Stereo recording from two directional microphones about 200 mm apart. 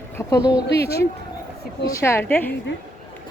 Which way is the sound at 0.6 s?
55° left (ahead or behind).